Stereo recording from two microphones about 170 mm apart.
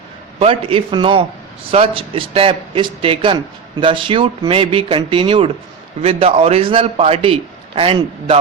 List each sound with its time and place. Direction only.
0.3 s speech: 35° right (ahead or behind)